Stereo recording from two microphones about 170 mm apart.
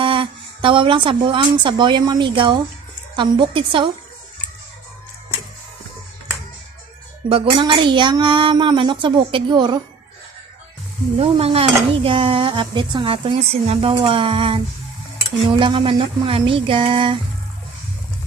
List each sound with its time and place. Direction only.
0.0 s a woman's voice: 30° right (ahead or behind)
7.3 s speech: 30° right (ahead or behind)
11.2 s a woman's voice: 35° right (ahead or behind)